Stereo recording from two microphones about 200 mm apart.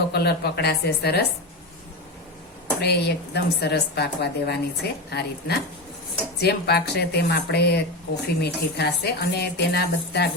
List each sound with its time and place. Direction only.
0.1 s a woman's voice: 55° left (ahead or behind)
2.8 s a woman's voice: 55° left (ahead or behind)